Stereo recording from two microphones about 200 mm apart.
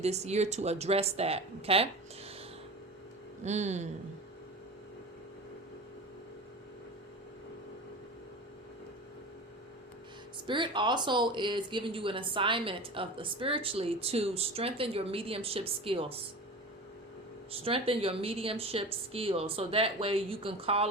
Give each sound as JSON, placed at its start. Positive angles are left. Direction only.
{"t": 0.0, "sound": "speech", "side_deg": -35}
{"t": 3.4, "sound": "speech", "side_deg": -35}
{"t": 10.4, "sound": "speech", "side_deg": -25}
{"t": 17.5, "sound": "speech", "side_deg": -30}